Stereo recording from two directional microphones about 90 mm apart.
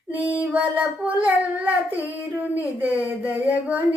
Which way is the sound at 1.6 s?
20° right (ahead or behind).